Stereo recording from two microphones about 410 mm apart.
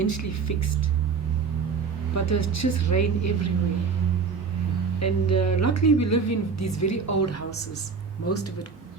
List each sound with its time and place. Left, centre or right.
0.0 s speech: left
2.1 s speech: left
4.9 s speech: left